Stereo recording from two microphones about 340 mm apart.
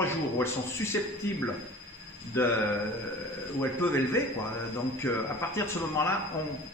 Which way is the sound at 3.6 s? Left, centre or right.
Centre.